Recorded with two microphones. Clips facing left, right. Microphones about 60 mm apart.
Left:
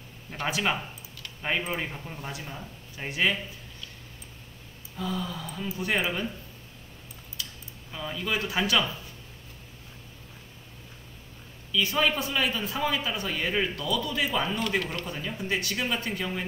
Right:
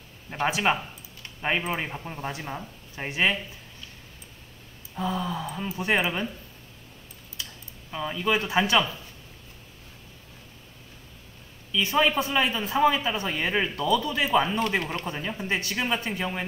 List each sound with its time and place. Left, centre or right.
0.3 s speech: right
4.9 s speech: right
7.9 s speech: right
11.7 s speech: right